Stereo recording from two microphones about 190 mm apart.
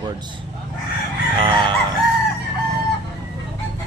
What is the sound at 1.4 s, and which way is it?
Fowl, 25° right (ahead or behind).